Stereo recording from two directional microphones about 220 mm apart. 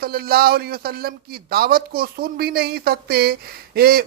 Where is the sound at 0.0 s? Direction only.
45° right (ahead or behind).